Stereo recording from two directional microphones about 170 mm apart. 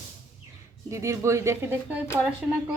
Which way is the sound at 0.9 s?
15° right (ahead or behind).